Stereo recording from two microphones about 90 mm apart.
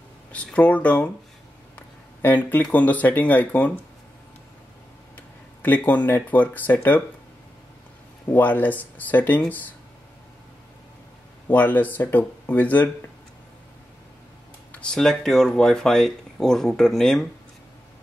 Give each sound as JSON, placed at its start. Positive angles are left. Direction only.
{"t": 0.3, "sound": "speech", "side_deg": 15}
{"t": 2.2, "sound": "speech", "side_deg": 20}
{"t": 5.1, "sound": "speech", "side_deg": 20}
{"t": 8.3, "sound": "speech", "side_deg": 20}
{"t": 11.4, "sound": "speech", "side_deg": 20}
{"t": 14.7, "sound": "speech", "side_deg": 10}